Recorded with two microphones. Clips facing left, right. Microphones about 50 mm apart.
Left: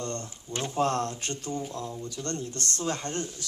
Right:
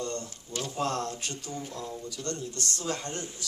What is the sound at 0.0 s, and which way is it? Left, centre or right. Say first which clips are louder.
Speech: even; left.